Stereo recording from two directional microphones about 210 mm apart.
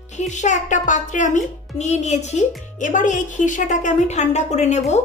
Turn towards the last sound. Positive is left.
turn(degrees=30)  # may be behind; listen again after turning